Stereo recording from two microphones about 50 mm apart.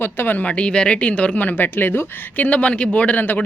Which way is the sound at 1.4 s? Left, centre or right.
Left.